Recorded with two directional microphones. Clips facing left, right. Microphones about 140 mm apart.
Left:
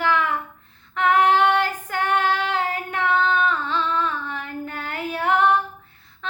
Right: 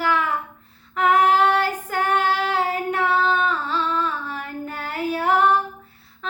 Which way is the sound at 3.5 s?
10° right (ahead or behind).